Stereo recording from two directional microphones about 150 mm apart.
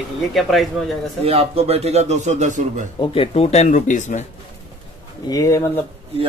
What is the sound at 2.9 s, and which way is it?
Speech, 35° left (ahead or behind).